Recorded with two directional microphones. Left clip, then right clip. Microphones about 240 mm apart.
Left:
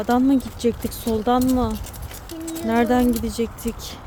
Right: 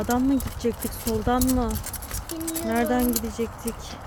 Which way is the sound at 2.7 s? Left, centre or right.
Left.